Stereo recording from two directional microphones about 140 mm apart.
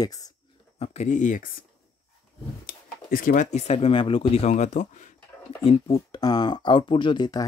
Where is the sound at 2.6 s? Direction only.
85° left; by 5.1 s 60° left (ahead or behind).